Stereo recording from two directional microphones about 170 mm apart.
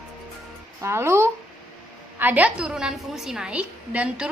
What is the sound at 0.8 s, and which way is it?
A woman's voice, 15° right (ahead or behind).